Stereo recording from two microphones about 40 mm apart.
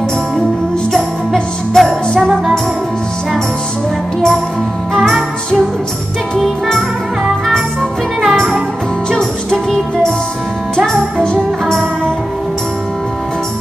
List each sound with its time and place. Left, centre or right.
1.8 s music: centre
8.3 s music: centre
9.1 s music: centre